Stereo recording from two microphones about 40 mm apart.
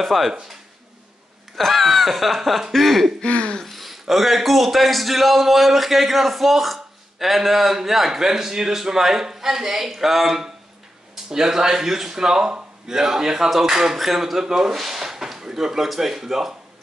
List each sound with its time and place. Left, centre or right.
0.0 s a man's voice: centre
0.3 s speech: centre
1.6 s a man's voice: centre
3.2 s a sound: left
3.6 s a man's voice: centre